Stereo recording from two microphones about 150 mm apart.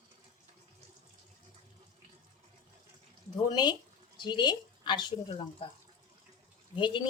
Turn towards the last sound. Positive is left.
turn(degrees=35)  # may be behind; listen again after turning